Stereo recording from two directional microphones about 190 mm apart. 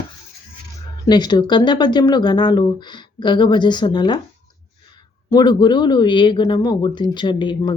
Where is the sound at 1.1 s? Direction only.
20° left (ahead or behind).